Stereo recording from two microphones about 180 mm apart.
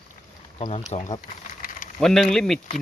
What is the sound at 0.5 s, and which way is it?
Speech, 35° left (ahead or behind).